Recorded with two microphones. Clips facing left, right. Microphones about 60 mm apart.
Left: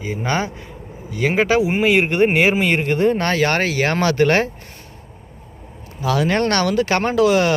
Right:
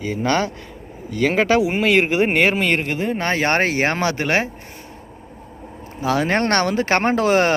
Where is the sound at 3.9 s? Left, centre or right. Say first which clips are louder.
Left 4 dB; right.